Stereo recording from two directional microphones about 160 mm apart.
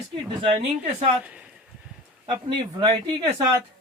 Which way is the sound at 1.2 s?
5° right (ahead or behind).